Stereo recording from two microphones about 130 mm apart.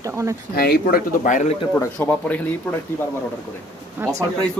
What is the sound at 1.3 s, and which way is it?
Speech, 75° left (ahead or behind).